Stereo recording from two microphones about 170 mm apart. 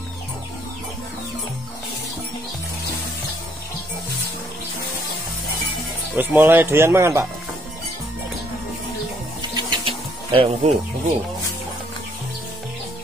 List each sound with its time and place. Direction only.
6.1 s speech: 10° right (ahead or behind)
9.6 s music: 30° right (ahead or behind)